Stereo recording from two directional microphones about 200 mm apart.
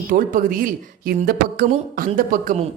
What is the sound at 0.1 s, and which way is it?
A woman's voice, 45° right (ahead or behind).